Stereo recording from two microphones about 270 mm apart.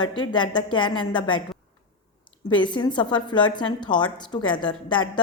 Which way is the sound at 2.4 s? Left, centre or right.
Centre.